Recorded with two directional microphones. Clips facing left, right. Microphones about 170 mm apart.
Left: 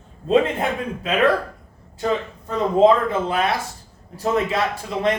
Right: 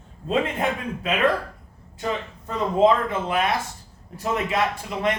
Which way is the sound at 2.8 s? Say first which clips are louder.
Left 3 dB; 35° left (ahead or behind).